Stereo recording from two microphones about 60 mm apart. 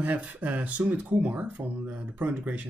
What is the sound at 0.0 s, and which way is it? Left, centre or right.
Speech, right.